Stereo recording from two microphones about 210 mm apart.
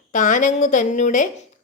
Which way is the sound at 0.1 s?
35° left (ahead or behind).